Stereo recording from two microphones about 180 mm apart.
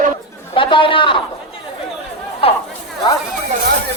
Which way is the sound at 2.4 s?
30° left (ahead or behind).